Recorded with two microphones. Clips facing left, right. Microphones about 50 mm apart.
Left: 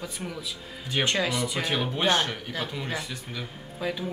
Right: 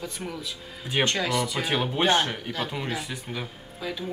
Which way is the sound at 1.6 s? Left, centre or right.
Centre.